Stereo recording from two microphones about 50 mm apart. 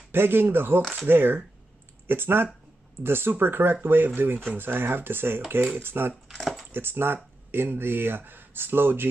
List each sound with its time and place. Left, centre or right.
0.1 s speech: right
6.4 s speech: centre
6.7 s speech: right